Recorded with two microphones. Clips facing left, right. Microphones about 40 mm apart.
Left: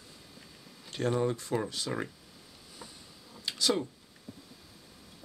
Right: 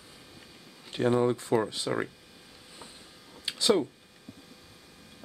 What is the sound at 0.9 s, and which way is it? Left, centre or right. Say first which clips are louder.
Speech: right 5 dB; centre.